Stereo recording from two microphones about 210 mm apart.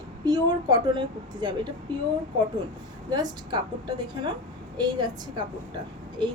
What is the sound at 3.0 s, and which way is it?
A woman's voice, 20° right (ahead or behind).